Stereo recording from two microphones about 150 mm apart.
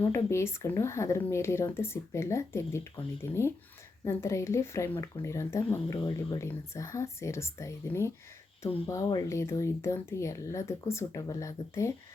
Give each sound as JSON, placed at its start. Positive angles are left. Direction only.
{"t": 0.0, "sound": "speech", "side_deg": 20}